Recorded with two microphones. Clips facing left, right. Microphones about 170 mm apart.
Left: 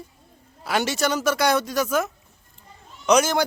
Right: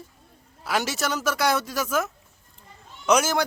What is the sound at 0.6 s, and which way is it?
Speech, centre (ahead or behind).